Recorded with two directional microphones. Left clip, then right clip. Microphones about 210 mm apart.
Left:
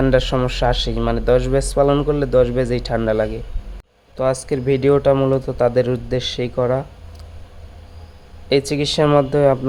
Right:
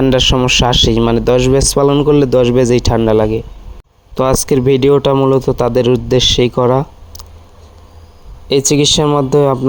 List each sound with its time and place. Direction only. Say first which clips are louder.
0.1 s speech: right 7 dB; 35° right (ahead or behind)
8.4 s speech: right 7 dB; 30° right (ahead or behind)